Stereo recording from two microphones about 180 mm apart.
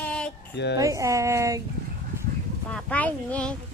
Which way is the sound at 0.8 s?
15° right (ahead or behind).